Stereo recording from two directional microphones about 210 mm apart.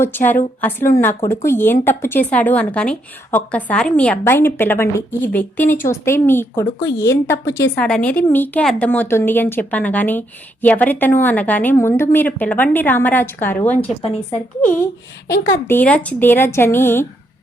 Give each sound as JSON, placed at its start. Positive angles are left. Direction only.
{"t": 0.0, "sound": "a woman's voice", "side_deg": 10}
{"t": 14.0, "sound": "speech", "side_deg": 30}
{"t": 15.3, "sound": "a woman's voice", "side_deg": 10}